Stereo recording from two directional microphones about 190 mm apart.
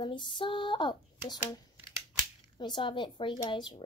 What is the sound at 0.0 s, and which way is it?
Speech, 25° left (ahead or behind).